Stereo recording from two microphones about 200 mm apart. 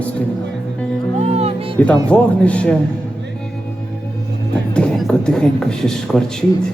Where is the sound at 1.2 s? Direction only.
30° right (ahead or behind).